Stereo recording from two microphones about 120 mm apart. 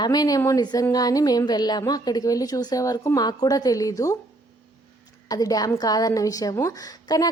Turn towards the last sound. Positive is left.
turn(degrees=30)  # may be behind; listen again after turning